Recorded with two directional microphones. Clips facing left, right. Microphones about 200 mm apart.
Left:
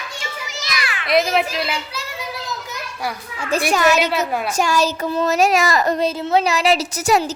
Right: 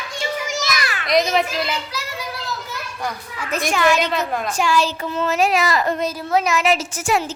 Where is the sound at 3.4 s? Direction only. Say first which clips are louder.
Left 2 dB; 30° left (ahead or behind).